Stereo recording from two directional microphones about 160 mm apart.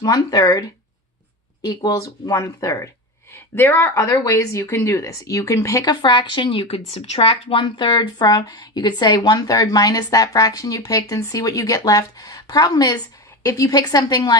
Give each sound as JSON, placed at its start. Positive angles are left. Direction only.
{"t": 0.0, "sound": "a woman's voice", "side_deg": 20}
{"t": 1.6, "sound": "a woman's voice", "side_deg": 25}